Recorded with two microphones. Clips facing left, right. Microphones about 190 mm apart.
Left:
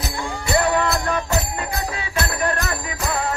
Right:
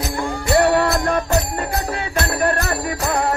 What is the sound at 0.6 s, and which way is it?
Jingle bell, 55° right (ahead or behind).